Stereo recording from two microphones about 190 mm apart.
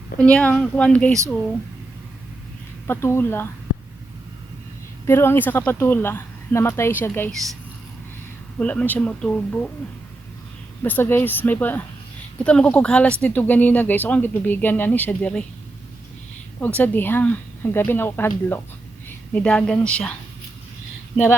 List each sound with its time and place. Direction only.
0.2 s speech: 5° left (ahead or behind)
2.8 s speech: 10° left (ahead or behind)
5.0 s speech: 10° left (ahead or behind)
8.5 s speech: 5° left (ahead or behind)
10.8 s speech: 10° left (ahead or behind)
16.6 s a woman's voice: 10° left (ahead or behind)